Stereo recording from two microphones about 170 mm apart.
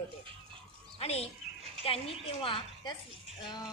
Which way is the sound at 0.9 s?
35° left (ahead or behind).